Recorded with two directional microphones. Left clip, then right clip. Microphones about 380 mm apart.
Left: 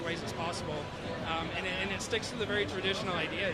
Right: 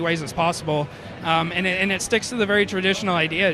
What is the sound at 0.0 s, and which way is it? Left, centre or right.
Speech, right.